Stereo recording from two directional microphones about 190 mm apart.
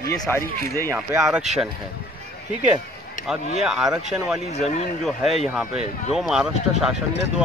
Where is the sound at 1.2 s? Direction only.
Centre (ahead or behind).